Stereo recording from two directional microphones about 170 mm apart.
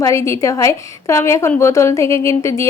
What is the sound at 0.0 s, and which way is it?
A woman's voice, 15° left (ahead or behind).